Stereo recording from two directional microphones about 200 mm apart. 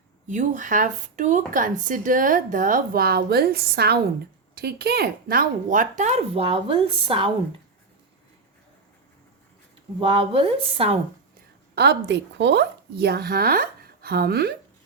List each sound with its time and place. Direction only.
0.3 s speech: 40° right (ahead or behind)
10.0 s speech: 25° right (ahead or behind)
11.7 s speech: 55° right (ahead or behind)